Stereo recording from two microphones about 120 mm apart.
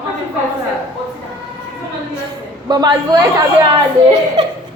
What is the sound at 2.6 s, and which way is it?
Speech, 35° right (ahead or behind).